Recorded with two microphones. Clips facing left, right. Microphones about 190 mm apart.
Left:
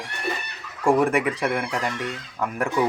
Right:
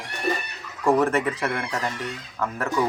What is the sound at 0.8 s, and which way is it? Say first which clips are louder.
Speech: left 1 dB; 15° left (ahead or behind).